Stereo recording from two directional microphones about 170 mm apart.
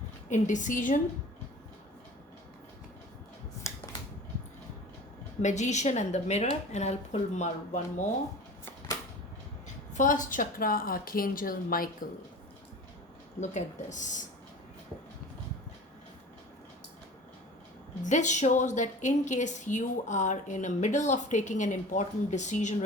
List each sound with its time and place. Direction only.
0.3 s a woman's voice: 45° left (ahead or behind)
5.4 s a woman's voice: 45° left (ahead or behind)
9.9 s a woman's voice: 50° left (ahead or behind)
13.4 s a woman's voice: 45° left (ahead or behind)
18.0 s a woman's voice: 45° left (ahead or behind)